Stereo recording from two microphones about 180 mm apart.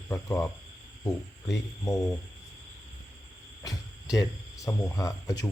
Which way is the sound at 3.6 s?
20° left (ahead or behind).